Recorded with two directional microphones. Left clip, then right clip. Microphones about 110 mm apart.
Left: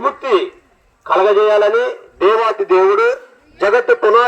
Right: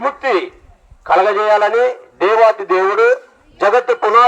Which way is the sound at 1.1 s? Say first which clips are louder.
Left 1 dB; 70° right (ahead or behind).